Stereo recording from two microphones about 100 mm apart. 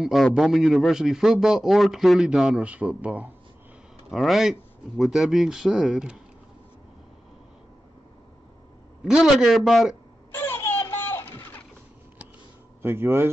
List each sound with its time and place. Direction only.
0.0 s a man's voice: 5° right (ahead or behind)
4.1 s a man's voice: centre (ahead or behind)
9.0 s a man's voice: 5° right (ahead or behind)
10.3 s a sound: 25° left (ahead or behind)
12.8 s speech: 25° right (ahead or behind)